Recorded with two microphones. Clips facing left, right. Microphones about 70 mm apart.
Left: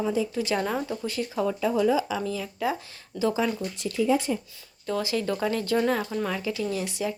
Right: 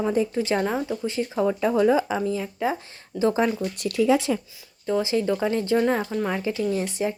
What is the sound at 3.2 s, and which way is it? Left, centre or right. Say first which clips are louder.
Speech: right 4 dB; right.